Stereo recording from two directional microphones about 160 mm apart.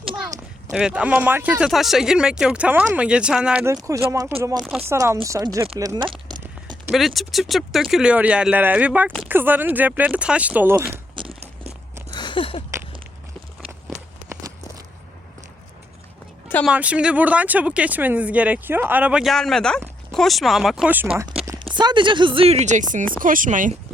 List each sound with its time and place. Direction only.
0.7 s speech: 5° right (ahead or behind)
3.8 s speech: 20° right (ahead or behind)
6.9 s speech: centre (ahead or behind)
11.1 s crunch: 35° right (ahead or behind)
12.1 s a sound: 30° left (ahead or behind)
16.6 s speech: 10° right (ahead or behind)
21.8 s speech: 30° right (ahead or behind); by 23.7 s 55° right (ahead or behind)